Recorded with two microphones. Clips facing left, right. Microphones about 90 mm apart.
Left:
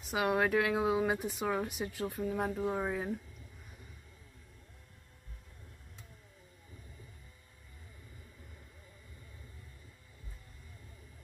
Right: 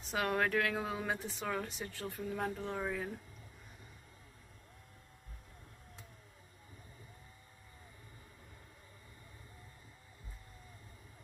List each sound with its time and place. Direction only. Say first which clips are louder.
0.1 s speech: left 3 dB; 10° left (ahead or behind)